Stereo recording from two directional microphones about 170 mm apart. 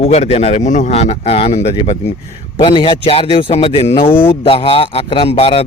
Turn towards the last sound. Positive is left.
turn(degrees=35)  # may be behind; listen again after turning